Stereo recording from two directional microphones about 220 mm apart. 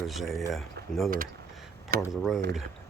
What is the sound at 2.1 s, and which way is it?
Speech, centre (ahead or behind).